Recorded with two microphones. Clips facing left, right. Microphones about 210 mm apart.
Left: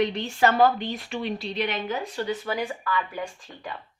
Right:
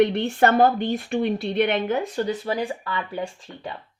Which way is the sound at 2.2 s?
35° right (ahead or behind).